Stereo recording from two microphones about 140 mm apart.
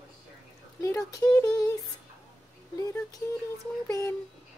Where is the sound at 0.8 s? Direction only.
20° left (ahead or behind).